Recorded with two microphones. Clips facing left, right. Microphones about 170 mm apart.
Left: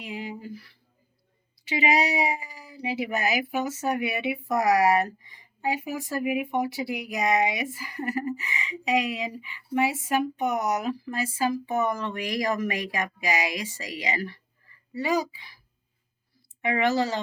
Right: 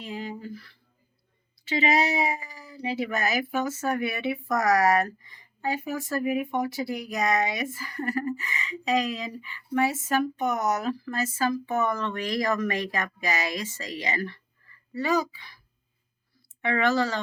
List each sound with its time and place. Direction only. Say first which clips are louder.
0.0 s a sound: even; 15° left (ahead or behind)
1.6 s speech: even; 15° left (ahead or behind)
4.6 s speech: left 1 dB; 40° right (ahead or behind)
4.9 s speech: even; 15° left (ahead or behind)
16.6 s speech: even; 15° left (ahead or behind)